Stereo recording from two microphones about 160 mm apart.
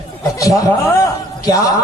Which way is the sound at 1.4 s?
20° left (ahead or behind).